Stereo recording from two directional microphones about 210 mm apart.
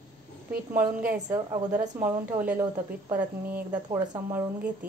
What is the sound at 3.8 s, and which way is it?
Speech, 20° right (ahead or behind).